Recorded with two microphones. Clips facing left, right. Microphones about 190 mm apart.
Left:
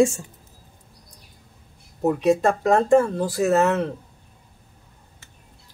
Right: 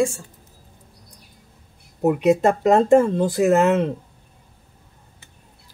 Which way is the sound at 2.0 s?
15° right (ahead or behind).